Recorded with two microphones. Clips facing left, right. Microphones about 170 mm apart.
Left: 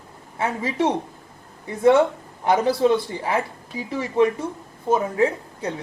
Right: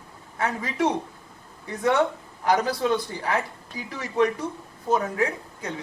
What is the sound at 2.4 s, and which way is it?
Speech, 25° left (ahead or behind).